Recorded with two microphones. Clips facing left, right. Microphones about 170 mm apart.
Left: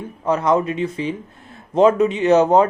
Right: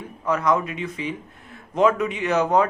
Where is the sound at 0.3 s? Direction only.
30° left (ahead or behind).